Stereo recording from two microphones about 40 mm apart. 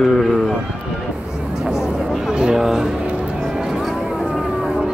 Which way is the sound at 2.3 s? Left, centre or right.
Centre.